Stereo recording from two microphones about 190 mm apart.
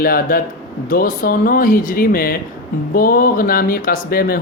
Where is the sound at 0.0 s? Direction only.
50° left (ahead or behind).